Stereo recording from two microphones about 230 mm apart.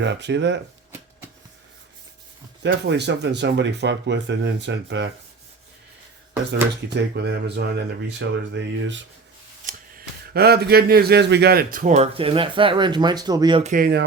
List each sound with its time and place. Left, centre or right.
0.0 s speech: right
2.6 s speech: right
6.8 s speech: right
9.6 s a man's voice: right